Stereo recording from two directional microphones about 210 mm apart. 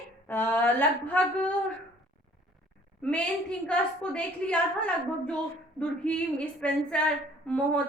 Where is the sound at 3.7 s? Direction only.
5° left (ahead or behind).